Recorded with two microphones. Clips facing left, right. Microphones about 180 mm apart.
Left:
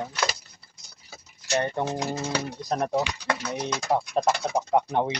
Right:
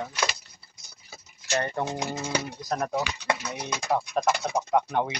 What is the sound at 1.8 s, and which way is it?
Speech, 20° left (ahead or behind).